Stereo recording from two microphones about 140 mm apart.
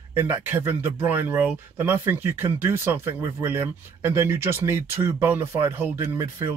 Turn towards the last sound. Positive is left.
turn(degrees=-20)  # may be behind; listen again after turning